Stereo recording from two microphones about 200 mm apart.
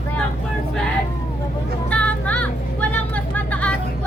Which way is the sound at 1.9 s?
5° left (ahead or behind).